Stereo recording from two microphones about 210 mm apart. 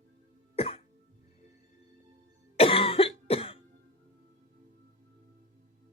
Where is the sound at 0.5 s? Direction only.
30° left (ahead or behind).